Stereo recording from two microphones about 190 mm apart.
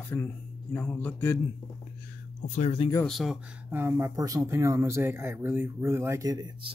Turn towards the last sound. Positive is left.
turn(degrees=-25)  # may be behind; listen again after turning